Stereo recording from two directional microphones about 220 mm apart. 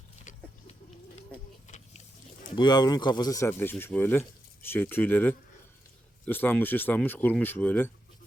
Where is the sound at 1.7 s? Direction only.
30° left (ahead or behind).